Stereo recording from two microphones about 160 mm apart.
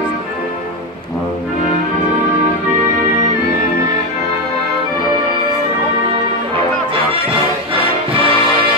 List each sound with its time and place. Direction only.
8.1 s music: 35° right (ahead or behind)